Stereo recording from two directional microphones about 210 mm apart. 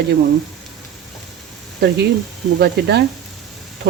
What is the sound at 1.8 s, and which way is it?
Speech, 50° right (ahead or behind).